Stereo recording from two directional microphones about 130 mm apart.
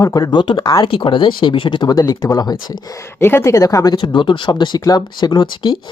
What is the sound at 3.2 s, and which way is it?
Speech, 20° left (ahead or behind).